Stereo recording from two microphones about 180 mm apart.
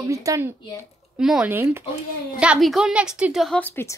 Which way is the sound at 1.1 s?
5° right (ahead or behind).